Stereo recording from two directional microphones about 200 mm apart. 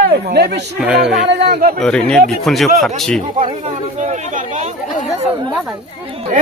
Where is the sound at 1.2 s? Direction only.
55° right (ahead or behind).